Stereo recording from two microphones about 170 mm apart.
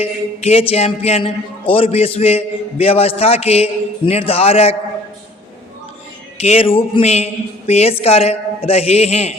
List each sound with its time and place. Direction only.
0.0 s a sound: 35° left (ahead or behind)
0.7 s a man's voice: 35° left (ahead or behind)
6.4 s a man's voice: 35° left (ahead or behind)